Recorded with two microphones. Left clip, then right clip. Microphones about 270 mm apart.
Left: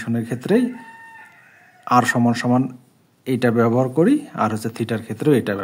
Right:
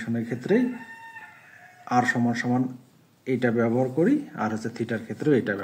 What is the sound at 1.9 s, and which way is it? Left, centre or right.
Speech, left.